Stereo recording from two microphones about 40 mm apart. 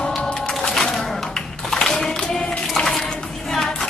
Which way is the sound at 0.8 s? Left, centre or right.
Centre.